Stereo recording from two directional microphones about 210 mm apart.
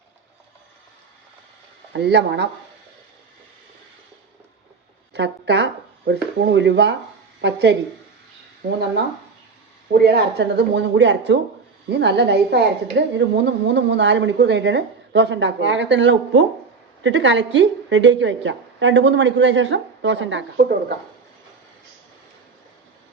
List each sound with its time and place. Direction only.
1.9 s a woman's voice: 55° right (ahead or behind)
5.1 s a woman's voice: 55° right (ahead or behind)
10.0 s a woman's voice: 50° right (ahead or behind)